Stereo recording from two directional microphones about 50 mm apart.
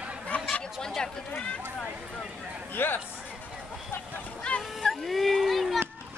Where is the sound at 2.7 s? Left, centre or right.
Left.